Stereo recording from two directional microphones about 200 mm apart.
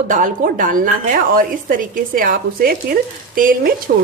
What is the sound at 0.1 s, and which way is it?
Speech, 40° right (ahead or behind).